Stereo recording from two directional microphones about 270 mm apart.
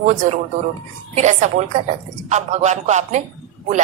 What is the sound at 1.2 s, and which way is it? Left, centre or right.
A woman's voice, right.